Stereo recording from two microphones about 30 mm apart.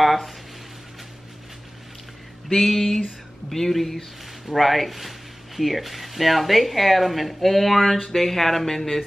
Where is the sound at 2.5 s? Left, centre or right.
Centre.